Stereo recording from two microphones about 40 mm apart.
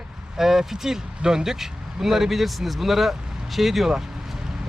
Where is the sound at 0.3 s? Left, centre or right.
Centre.